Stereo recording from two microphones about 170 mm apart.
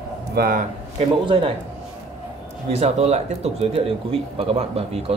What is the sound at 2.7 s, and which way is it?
A man's voice, 40° right (ahead or behind).